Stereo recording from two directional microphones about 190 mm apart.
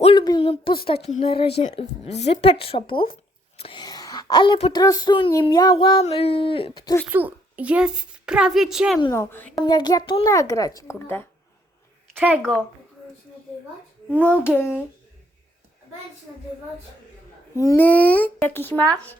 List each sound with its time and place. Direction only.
0.0 s speech: 25° left (ahead or behind)
1.6 s a sound: 35° left (ahead or behind)
3.6 s speech: 25° left (ahead or behind)
4.8 s a sound: 20° left (ahead or behind)
7.1 s a child's voice: 10° right (ahead or behind)
9.0 s a child's voice: 20° left (ahead or behind)
12.1 s a woman's voice: 10° right (ahead or behind)
14.3 s a child's voice: 10° left (ahead or behind)
17.6 s a child's voice: 15° left (ahead or behind)